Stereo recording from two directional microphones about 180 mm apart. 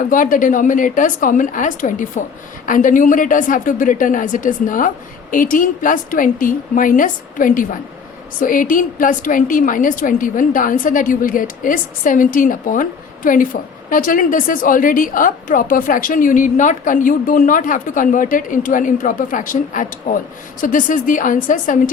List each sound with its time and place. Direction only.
0.1 s a woman's voice: 45° left (ahead or behind)